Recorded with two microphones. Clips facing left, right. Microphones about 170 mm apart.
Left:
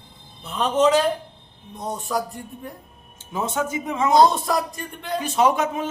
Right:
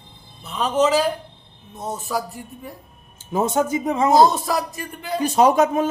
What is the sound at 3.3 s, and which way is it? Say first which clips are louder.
Speech: right 5 dB; 40° right (ahead or behind).